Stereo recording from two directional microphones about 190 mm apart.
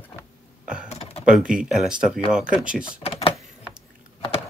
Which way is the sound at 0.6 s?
5° right (ahead or behind).